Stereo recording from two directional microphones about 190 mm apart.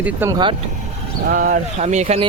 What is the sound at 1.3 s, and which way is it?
Speech, 50° right (ahead or behind).